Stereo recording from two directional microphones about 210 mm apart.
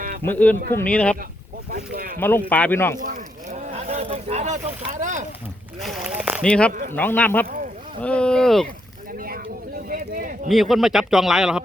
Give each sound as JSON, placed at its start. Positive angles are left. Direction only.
{"t": 0.3, "sound": "speech", "side_deg": 5}
{"t": 1.7, "sound": "boat", "side_deg": -45}
{"t": 2.1, "sound": "speech", "side_deg": 10}
{"t": 3.0, "sound": "a sound", "side_deg": -40}
{"t": 5.8, "sound": "a man's voice", "side_deg": -5}
{"t": 9.1, "sound": "a sound", "side_deg": -45}
{"t": 10.5, "sound": "a man's voice", "side_deg": 0}